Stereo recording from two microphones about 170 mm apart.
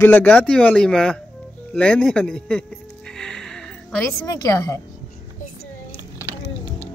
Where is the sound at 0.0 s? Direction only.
10° left (ahead or behind).